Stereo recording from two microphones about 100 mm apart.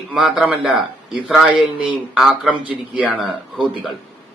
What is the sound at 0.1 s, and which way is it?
Speech, 5° right (ahead or behind).